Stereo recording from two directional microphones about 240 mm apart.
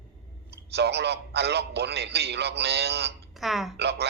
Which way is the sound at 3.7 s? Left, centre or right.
Right.